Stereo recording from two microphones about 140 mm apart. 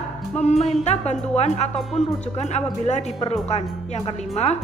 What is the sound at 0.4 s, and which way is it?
Music, 55° left (ahead or behind).